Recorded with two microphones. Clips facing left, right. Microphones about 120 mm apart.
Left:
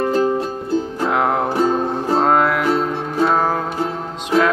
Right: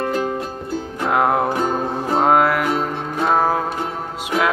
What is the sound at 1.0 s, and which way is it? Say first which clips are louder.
Music: right 3 dB; centre (ahead or behind).